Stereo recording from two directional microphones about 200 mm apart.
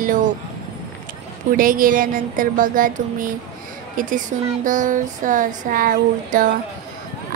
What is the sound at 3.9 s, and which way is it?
Speech, 40° right (ahead or behind).